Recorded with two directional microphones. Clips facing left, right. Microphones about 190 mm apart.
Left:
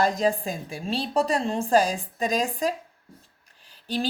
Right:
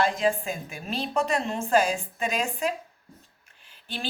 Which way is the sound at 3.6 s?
35° left (ahead or behind).